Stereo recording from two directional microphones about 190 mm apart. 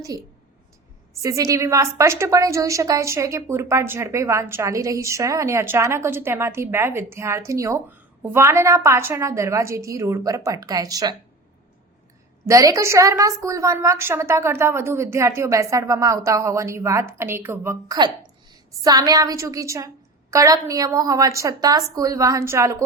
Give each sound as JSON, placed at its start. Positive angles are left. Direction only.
{"t": 1.2, "sound": "a woman's voice", "side_deg": -15}
{"t": 12.5, "sound": "a woman's voice", "side_deg": -15}